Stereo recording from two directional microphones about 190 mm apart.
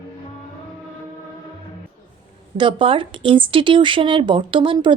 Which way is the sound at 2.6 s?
25° right (ahead or behind).